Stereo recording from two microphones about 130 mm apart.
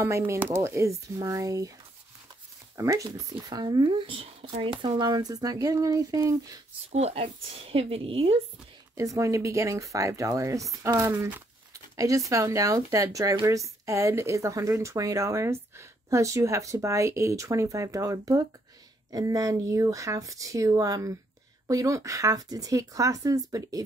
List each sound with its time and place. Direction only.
0.0 s a woman's voice: 20° right (ahead or behind)
2.8 s a woman's voice: 25° right (ahead or behind)
6.9 s a woman's voice: 55° right (ahead or behind)
8.9 s a woman's voice: 25° right (ahead or behind)
12.3 s a woman's voice: 25° right (ahead or behind)